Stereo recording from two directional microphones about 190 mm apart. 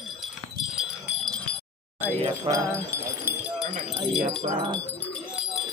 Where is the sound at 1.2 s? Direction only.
5° left (ahead or behind).